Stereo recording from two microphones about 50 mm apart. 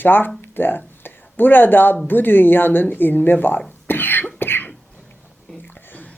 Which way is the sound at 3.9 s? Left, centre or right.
Left.